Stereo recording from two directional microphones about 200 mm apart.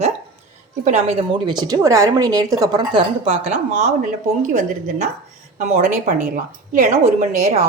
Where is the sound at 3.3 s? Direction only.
40° right (ahead or behind).